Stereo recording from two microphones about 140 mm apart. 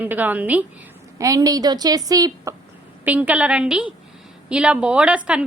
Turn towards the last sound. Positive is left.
turn(degrees=-10)  # may be behind; listen again after turning